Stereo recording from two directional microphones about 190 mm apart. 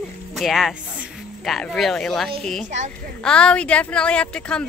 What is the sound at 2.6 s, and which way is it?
Speech, 40° right (ahead or behind).